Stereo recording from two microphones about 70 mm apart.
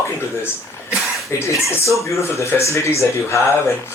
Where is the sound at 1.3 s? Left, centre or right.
Left.